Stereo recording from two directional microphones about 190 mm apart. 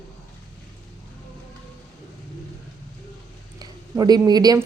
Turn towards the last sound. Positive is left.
turn(degrees=-20)  # may be behind; listen again after turning